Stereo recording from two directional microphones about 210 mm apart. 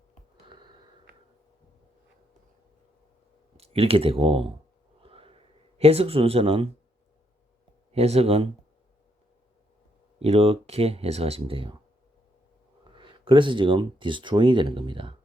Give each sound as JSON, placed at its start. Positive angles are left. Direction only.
{"t": 0.4, "sound": "sniff", "side_deg": -20}
{"t": 3.6, "sound": "speech", "side_deg": -30}
{"t": 5.0, "sound": "a sound", "side_deg": -25}
{"t": 7.9, "sound": "speech", "side_deg": -30}
{"t": 10.2, "sound": "speech", "side_deg": -30}
{"t": 12.8, "sound": "speech", "side_deg": -25}